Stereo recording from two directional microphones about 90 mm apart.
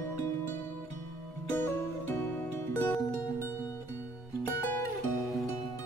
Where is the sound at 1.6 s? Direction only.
25° left (ahead or behind).